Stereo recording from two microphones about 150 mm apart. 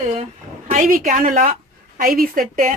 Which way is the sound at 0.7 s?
60° right (ahead or behind).